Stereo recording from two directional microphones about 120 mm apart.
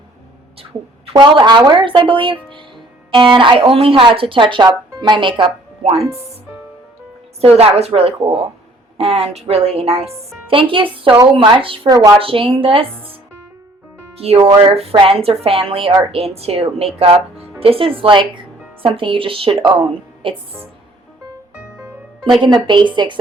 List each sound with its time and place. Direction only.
1.1 s speech: 35° right (ahead or behind)
7.4 s a woman's voice: 60° right (ahead or behind)
14.2 s a woman's voice: 55° right (ahead or behind)
22.6 s a woman's voice: 40° right (ahead or behind)